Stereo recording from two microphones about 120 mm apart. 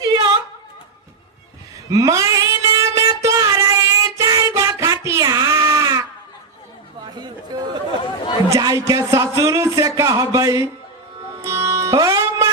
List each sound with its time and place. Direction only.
0.0 s music: 35° right (ahead or behind)
1.9 s a sound: 30° right (ahead or behind)
7.2 s chatter: 35° right (ahead or behind)
8.5 s speech: 30° right (ahead or behind)
11.3 s music: 25° right (ahead or behind)